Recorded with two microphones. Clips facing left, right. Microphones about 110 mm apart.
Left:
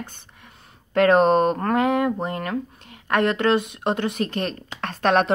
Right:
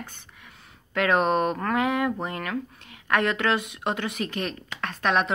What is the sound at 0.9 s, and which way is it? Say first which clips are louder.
Speech: left 6 dB; 35° left (ahead or behind).